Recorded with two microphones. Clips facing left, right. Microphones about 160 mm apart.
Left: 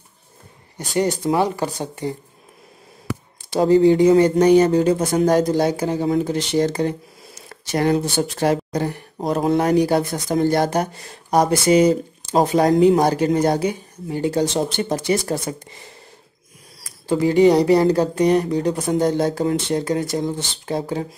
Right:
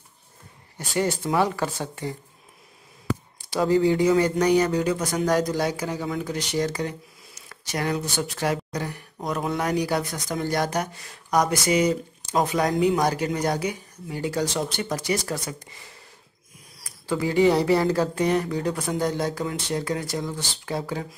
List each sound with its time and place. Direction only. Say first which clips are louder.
0.7 s speech: left 4 dB; 20° left (ahead or behind)
3.4 s speech: left 6 dB; 25° left (ahead or behind)
17.1 s speech: left 7 dB; 25° left (ahead or behind)
17.7 s speech: left 6 dB; 35° left (ahead or behind)
18.2 s speech: left 8 dB; 20° left (ahead or behind)